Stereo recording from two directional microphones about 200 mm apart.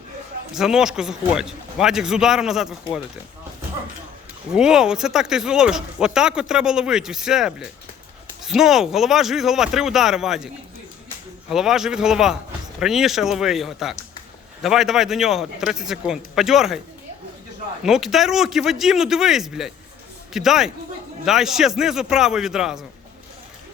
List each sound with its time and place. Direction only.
0.5 s speech: centre (ahead or behind)
4.5 s speech: 5° right (ahead or behind)
11.5 s speech: centre (ahead or behind)
17.8 s speech: centre (ahead or behind)